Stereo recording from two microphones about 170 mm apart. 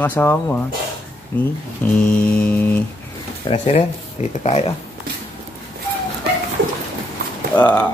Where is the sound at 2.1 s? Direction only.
5° left (ahead or behind).